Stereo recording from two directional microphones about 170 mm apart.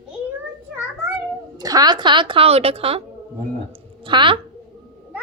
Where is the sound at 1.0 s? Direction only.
20° right (ahead or behind); by 3.0 s 35° right (ahead or behind).